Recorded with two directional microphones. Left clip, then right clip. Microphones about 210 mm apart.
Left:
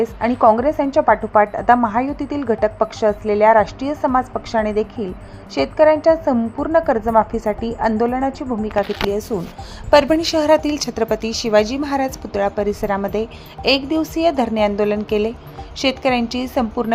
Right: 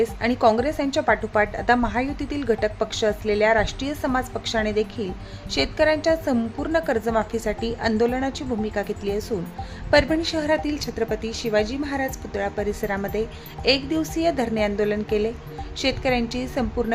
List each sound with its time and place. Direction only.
0.0 s a woman's voice: 5° left (ahead or behind)